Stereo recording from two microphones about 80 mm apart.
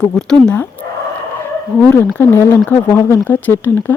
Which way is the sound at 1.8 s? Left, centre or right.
Left.